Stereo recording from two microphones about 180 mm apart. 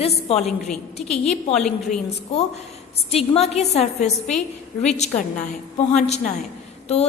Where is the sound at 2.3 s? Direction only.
35° left (ahead or behind).